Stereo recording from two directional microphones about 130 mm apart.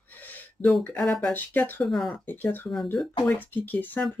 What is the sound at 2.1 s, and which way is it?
Speech, 15° left (ahead or behind).